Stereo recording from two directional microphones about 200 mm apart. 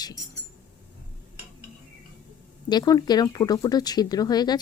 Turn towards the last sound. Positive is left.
turn(degrees=20)  # may be behind; listen again after turning